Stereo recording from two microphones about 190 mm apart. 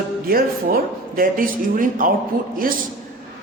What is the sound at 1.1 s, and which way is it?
Speech, 45° right (ahead or behind).